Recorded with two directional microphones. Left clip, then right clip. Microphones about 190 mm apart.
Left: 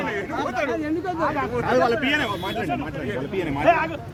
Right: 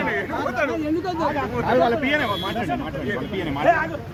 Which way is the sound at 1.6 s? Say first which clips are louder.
Right 1 dB; 40° left (ahead or behind).